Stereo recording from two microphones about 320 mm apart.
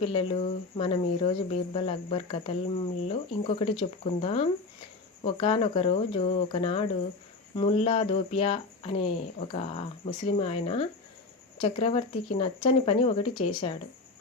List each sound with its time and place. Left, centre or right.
0.1 s speech: centre